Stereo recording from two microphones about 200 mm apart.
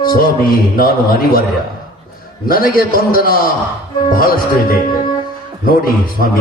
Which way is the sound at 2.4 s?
45° left (ahead or behind).